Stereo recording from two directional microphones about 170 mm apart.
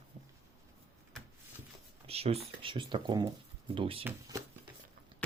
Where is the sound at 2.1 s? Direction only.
35° right (ahead or behind).